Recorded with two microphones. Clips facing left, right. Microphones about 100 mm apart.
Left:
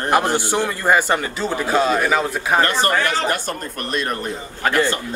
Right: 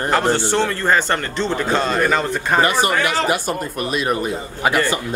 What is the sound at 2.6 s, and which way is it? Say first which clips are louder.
Speech: right 2 dB; 10° right (ahead or behind).